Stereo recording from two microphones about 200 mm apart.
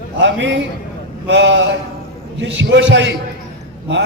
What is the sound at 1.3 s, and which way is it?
A man's voice, 65° right (ahead or behind).